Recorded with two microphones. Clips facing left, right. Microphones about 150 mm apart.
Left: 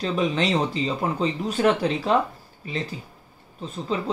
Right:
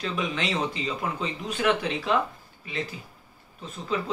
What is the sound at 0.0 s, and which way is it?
Speech, 35° left (ahead or behind).